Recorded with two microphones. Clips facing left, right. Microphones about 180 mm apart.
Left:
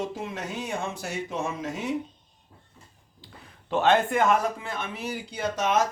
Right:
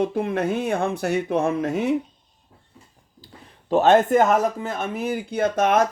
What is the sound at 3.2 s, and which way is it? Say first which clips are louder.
Speech: right 2 dB; 40° right (ahead or behind).